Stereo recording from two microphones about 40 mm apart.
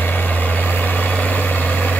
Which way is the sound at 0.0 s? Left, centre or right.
Left.